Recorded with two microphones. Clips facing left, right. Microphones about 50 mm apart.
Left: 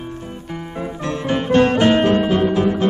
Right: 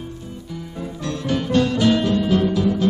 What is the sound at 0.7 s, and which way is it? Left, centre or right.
Music, left.